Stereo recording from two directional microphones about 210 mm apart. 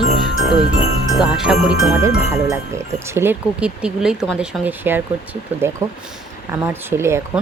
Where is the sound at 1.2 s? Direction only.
5° right (ahead or behind).